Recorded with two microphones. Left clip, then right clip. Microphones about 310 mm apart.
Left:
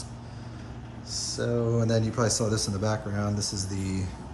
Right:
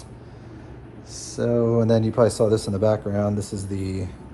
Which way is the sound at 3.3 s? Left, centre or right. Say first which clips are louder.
Right 2 dB; right.